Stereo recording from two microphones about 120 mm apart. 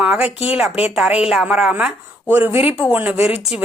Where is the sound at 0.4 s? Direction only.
10° right (ahead or behind).